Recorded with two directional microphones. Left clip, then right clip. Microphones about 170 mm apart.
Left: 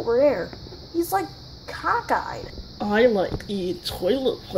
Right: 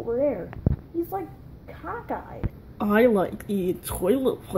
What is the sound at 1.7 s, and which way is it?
A woman's voice, 15° right (ahead or behind).